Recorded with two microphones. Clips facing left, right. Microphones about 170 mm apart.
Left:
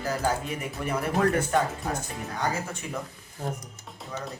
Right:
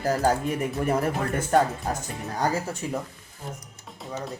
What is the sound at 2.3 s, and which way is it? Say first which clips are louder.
Speech: right 4 dB; 40° right (ahead or behind).